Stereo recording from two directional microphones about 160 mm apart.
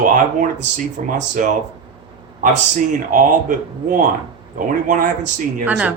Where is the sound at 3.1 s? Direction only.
60° right (ahead or behind).